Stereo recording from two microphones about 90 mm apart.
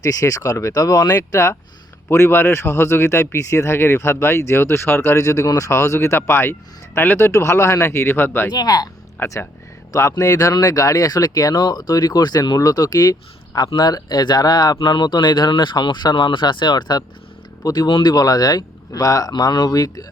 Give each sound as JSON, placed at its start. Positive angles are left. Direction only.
{"t": 0.0, "sound": "speech", "side_deg": 40}
{"t": 5.1, "sound": "speech", "side_deg": 35}
{"t": 8.5, "sound": "speech", "side_deg": 45}
{"t": 9.2, "sound": "speech", "side_deg": 35}
{"t": 17.8, "sound": "speech", "side_deg": 60}
{"t": 19.3, "sound": "speech", "side_deg": 50}